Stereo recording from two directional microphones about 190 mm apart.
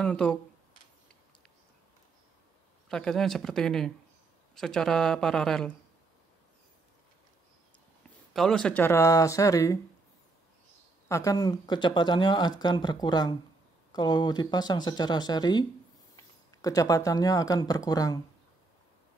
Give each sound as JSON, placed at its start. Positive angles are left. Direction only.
{"t": 0.0, "sound": "speech", "side_deg": 5}
{"t": 2.9, "sound": "speech", "side_deg": 5}
{"t": 8.3, "sound": "speech", "side_deg": 0}
{"t": 11.1, "sound": "speech", "side_deg": 15}
{"t": 16.6, "sound": "speech", "side_deg": 20}